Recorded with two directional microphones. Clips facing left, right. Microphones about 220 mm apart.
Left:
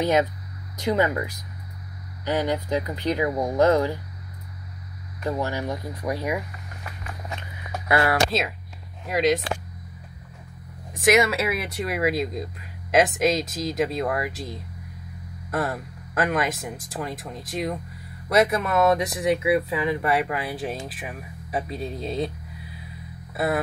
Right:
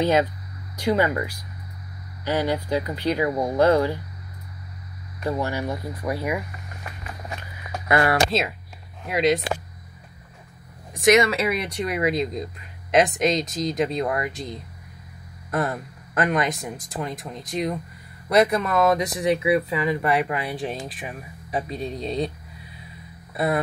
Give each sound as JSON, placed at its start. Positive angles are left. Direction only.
{"t": 0.7, "sound": "speech", "side_deg": 20}
{"t": 2.2, "sound": "speech", "side_deg": 15}
{"t": 5.4, "sound": "speech", "side_deg": -10}
{"t": 6.0, "sound": "speech", "side_deg": 5}
{"t": 7.7, "sound": "speech", "side_deg": 5}
{"t": 11.0, "sound": "speech", "side_deg": 0}
{"t": 23.3, "sound": "speech", "side_deg": 0}